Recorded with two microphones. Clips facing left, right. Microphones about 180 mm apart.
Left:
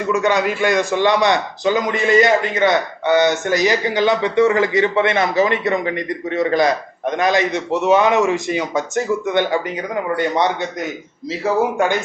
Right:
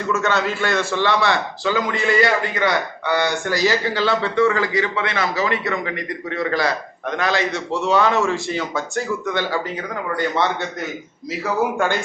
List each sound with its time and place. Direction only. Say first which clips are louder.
0.1 s a man's voice: left 3 dB; 15° left (ahead or behind)